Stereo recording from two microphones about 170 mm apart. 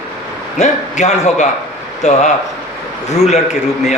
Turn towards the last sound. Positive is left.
turn(degrees=40)  # may be behind; listen again after turning